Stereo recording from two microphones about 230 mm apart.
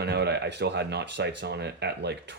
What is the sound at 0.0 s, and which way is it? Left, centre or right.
Speech, right.